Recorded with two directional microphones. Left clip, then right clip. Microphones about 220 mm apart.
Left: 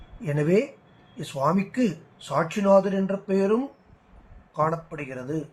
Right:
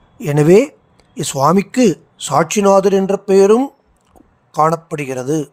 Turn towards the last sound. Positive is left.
turn(degrees=-55)  # may be behind; listen again after turning